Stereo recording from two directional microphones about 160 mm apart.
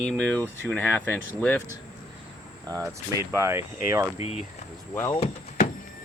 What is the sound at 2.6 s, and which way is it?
Speech, 20° right (ahead or behind).